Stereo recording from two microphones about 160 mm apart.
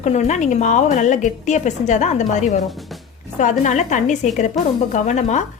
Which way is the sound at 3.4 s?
50° left (ahead or behind).